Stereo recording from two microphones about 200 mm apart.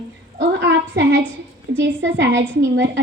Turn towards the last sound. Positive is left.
turn(degrees=-65)  # may be behind; listen again after turning